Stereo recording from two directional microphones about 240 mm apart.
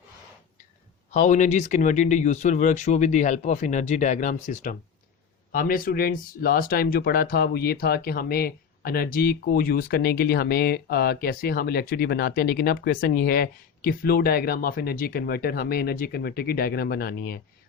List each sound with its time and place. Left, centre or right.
1.1 s speech: left